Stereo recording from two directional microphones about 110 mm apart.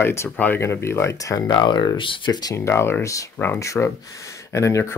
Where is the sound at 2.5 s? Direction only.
25° left (ahead or behind).